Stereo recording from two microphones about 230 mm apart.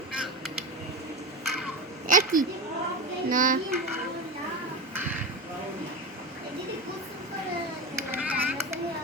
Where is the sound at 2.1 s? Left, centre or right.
Right.